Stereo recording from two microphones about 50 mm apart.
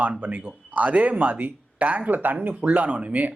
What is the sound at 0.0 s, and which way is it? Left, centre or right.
Speech, right.